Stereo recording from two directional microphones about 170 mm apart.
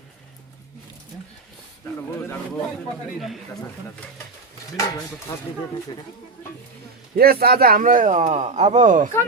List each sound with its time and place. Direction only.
4.7 s speech: 20° left (ahead or behind)
7.2 s speech: 65° right (ahead or behind); by 9.1 s 50° right (ahead or behind)